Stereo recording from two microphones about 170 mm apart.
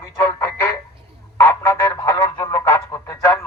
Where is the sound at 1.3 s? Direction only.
15° left (ahead or behind).